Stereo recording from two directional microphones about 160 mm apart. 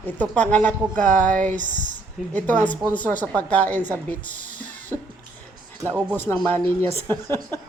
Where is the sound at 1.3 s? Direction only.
50° right (ahead or behind).